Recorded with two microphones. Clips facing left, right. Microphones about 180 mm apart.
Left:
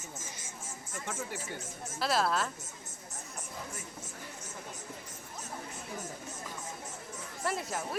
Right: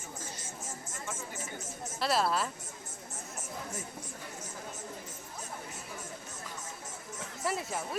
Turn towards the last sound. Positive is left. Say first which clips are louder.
# even
turn(degrees=0)  # may be behind; listen again after turning